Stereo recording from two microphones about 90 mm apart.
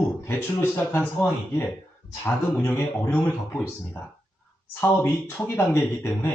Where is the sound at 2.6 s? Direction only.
25° left (ahead or behind).